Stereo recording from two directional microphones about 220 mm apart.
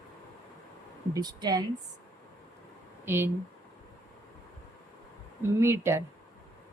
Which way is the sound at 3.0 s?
10° right (ahead or behind).